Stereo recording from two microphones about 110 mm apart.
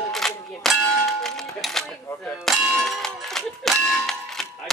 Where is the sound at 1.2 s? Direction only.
5° left (ahead or behind).